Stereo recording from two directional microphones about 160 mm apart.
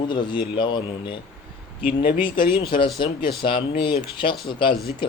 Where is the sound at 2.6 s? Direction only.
30° left (ahead or behind).